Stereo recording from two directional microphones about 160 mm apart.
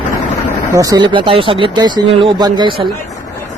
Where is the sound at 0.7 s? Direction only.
20° right (ahead or behind).